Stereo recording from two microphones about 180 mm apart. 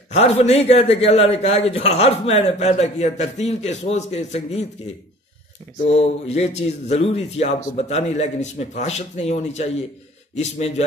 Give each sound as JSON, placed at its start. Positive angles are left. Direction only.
{"t": 0.1, "sound": "a man's voice", "side_deg": 35}
{"t": 5.9, "sound": "a man's voice", "side_deg": 35}